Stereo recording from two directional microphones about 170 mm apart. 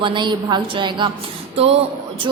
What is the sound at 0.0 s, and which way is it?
Speech, 30° right (ahead or behind).